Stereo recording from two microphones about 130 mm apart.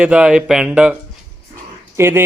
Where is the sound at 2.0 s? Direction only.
20° right (ahead or behind).